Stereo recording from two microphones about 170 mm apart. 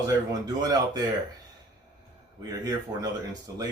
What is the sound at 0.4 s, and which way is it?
Speech, 20° right (ahead or behind).